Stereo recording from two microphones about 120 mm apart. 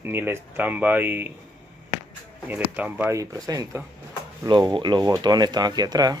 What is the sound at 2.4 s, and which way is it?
Speech, 15° right (ahead or behind).